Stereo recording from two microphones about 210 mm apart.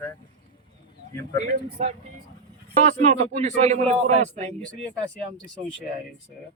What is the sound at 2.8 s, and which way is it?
A man's voice, 35° right (ahead or behind).